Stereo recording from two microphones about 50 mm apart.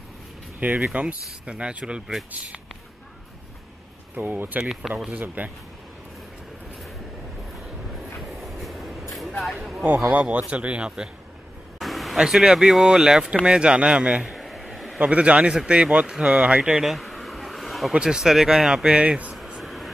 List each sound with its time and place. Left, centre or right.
0.6 s speech: right
4.1 s speech: right
4.9 s speech: centre
5.2 s speech: right
8.3 s train: centre
9.4 s speech: centre
10.3 s speech: right
11.8 s a sound: centre
12.2 s speech: centre
14.2 s a sound: centre
15.0 s speech: right
16.8 s bee: centre
17.9 s speech: centre
19.4 s a sound: centre